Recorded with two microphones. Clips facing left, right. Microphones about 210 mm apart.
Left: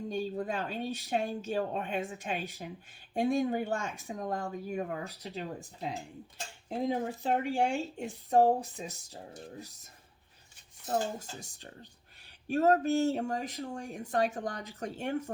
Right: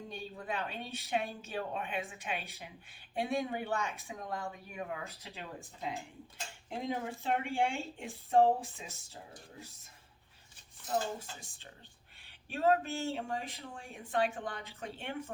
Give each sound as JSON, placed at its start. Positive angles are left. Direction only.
{"t": 0.1, "sound": "speech", "side_deg": 40}